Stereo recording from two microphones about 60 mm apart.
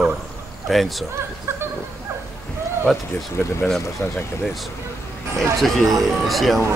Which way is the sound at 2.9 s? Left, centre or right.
Centre.